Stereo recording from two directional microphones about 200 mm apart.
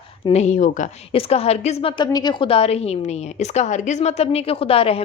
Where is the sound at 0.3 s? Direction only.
35° left (ahead or behind).